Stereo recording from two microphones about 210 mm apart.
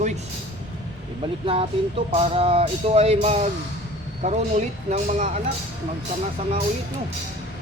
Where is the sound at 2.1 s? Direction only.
30° right (ahead or behind).